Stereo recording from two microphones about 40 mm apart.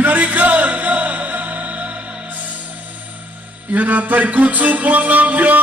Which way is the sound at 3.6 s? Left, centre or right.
Right.